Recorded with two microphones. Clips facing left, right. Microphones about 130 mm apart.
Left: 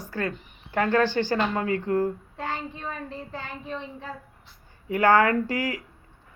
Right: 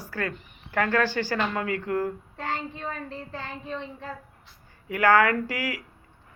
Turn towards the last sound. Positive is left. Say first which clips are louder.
# left 3 dB
turn(degrees=25)  # may be behind; listen again after turning